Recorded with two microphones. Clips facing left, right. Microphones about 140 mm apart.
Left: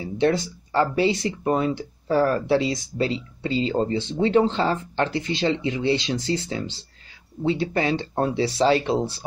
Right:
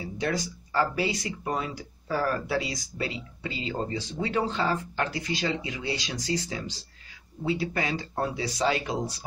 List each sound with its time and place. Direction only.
0.0 s speech: 25° left (ahead or behind)